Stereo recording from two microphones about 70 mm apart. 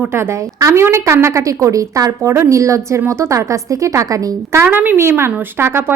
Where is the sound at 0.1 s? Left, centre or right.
Right.